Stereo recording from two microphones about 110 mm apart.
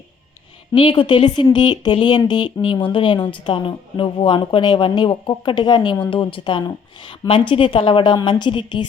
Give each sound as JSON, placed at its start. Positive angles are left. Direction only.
{"t": 0.7, "sound": "a woman's voice", "side_deg": 50}